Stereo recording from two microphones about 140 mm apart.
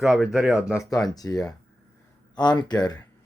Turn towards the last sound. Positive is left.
turn(degrees=30)  # may be behind; listen again after turning